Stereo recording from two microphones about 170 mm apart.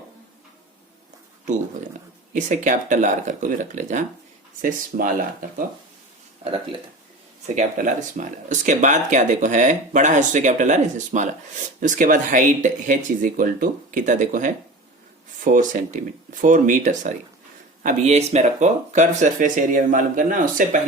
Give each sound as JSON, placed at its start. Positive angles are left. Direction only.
{"t": 2.3, "sound": "speech", "side_deg": -50}
{"t": 7.4, "sound": "speech", "side_deg": -45}
{"t": 15.5, "sound": "speech", "side_deg": -50}